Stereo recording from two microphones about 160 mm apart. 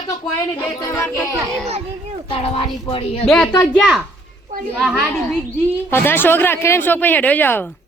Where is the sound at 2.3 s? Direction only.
40° left (ahead or behind).